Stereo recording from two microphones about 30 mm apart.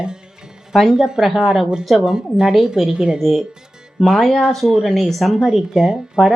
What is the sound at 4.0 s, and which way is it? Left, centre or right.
Speech, centre.